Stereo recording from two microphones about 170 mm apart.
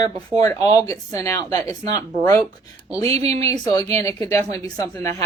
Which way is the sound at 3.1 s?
35° right (ahead or behind).